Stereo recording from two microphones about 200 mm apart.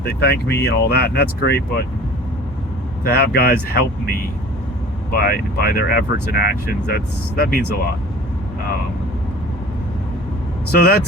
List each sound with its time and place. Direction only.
0.0 s speech: 55° left (ahead or behind)
3.0 s speech: 50° left (ahead or behind)
5.1 s speech: 50° left (ahead or behind)
10.7 s speech: 50° left (ahead or behind)